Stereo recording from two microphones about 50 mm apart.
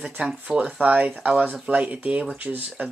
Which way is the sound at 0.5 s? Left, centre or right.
Right.